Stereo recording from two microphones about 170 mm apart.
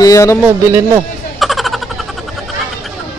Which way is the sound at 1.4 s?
Centre (ahead or behind).